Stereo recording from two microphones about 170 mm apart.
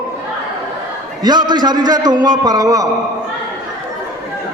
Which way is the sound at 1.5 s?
25° right (ahead or behind).